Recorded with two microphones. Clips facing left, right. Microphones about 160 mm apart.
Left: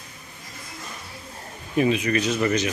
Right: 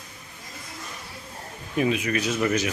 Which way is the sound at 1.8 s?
5° right (ahead or behind).